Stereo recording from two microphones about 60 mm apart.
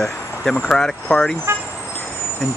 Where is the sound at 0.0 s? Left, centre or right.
Centre.